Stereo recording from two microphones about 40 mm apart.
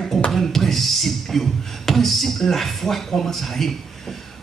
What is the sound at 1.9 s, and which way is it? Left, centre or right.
Speech, centre.